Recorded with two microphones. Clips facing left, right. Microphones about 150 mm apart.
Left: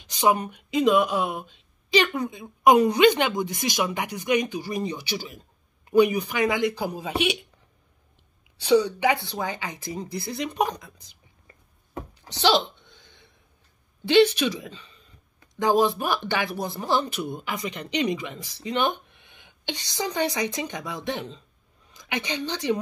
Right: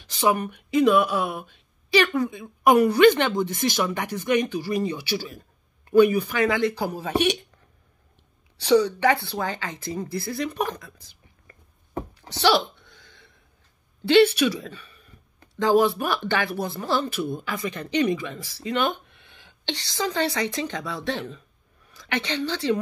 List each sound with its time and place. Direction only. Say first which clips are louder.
0.0 s speech: even; 15° left (ahead or behind)
8.6 s speech: right 1 dB; 15° left (ahead or behind)
12.1 s a sound: right 1 dB; 20° left (ahead or behind)
14.0 s a woman's voice: right 1 dB; 15° left (ahead or behind)